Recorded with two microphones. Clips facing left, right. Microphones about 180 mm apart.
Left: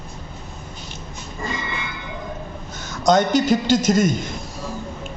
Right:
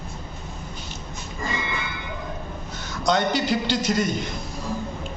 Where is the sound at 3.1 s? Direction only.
45° left (ahead or behind).